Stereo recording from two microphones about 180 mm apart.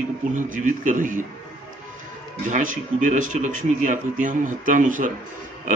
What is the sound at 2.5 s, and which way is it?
Speech, 45° right (ahead or behind).